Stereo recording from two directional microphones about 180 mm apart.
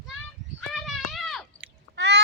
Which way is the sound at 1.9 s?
75° right (ahead or behind).